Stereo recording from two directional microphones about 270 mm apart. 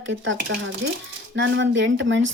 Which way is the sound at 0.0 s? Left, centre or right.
Right.